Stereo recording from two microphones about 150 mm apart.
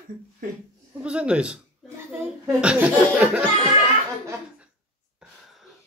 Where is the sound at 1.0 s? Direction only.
5° right (ahead or behind).